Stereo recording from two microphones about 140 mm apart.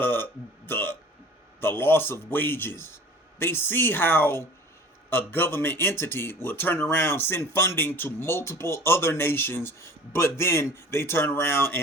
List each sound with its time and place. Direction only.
0.0 s speech: 15° left (ahead or behind)